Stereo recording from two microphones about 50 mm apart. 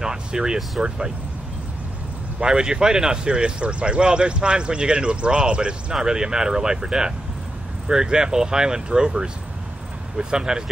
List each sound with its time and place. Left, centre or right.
0.0 s a sound: centre
0.8 s speech: centre
2.4 s speech: centre